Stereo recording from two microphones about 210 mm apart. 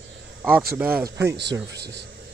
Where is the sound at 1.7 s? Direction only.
50° right (ahead or behind).